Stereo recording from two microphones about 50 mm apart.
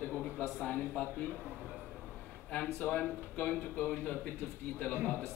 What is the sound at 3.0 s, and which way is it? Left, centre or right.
A man's voice, left.